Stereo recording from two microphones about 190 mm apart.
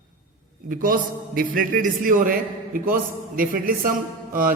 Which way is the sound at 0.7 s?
45° right (ahead or behind).